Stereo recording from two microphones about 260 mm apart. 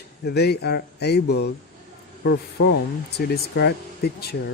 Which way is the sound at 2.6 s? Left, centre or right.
Left.